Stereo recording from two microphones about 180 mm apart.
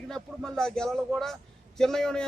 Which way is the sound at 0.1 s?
5° left (ahead or behind).